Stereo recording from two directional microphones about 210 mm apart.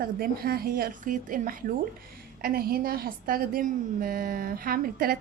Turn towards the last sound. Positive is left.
turn(degrees=-45)  # may be behind; listen again after turning